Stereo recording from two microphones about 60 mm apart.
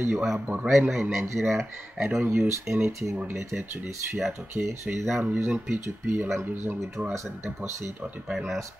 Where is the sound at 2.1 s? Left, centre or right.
Right.